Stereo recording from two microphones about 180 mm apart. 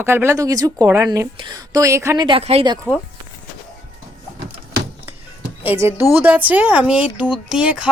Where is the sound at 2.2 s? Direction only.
30° right (ahead or behind).